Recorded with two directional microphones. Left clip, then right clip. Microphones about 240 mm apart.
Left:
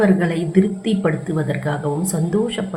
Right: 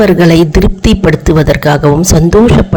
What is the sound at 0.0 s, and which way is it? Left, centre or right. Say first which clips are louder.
A man's voice: right 12 dB; right.